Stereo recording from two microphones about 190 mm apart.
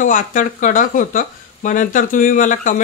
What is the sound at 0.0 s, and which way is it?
Speech, 45° left (ahead or behind).